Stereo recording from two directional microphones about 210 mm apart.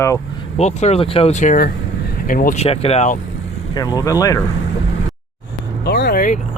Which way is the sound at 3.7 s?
20° left (ahead or behind).